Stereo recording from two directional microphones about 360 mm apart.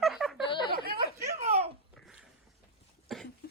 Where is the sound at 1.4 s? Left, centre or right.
Centre.